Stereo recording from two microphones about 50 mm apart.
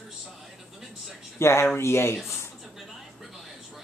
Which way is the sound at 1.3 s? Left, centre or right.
Left.